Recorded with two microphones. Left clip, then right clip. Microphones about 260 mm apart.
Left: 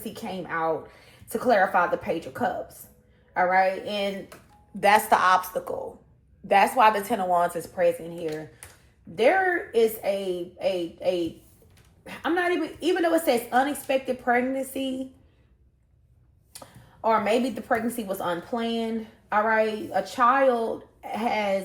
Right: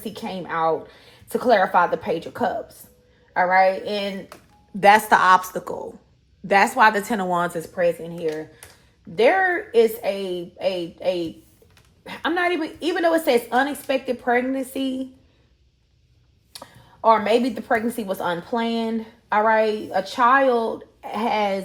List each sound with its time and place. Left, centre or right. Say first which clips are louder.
0.0 s a woman's voice: right 3 dB; right
9.7 s a woman's voice: right 5 dB; right
16.6 s a woman's voice: right 5 dB; right